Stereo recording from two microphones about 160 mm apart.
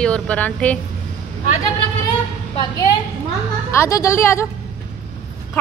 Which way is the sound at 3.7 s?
20° left (ahead or behind).